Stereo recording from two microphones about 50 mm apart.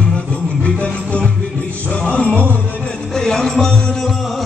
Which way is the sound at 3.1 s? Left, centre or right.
Centre.